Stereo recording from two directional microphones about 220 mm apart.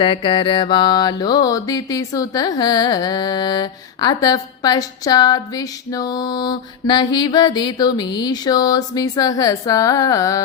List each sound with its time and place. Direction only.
0.0 s mantra: 25° left (ahead or behind)